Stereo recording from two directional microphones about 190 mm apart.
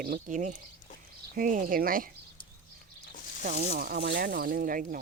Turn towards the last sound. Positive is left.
turn(degrees=-45)  # may be behind; listen again after turning